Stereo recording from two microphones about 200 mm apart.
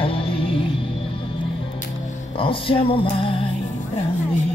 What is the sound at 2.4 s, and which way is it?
Speech, 25° left (ahead or behind).